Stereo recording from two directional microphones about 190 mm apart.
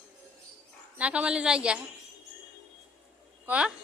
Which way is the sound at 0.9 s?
5° right (ahead or behind).